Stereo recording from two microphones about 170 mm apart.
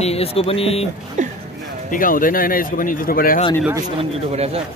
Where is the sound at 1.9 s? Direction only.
55° left (ahead or behind).